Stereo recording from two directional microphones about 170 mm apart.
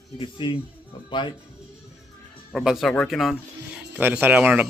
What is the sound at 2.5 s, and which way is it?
Speech, centre (ahead or behind).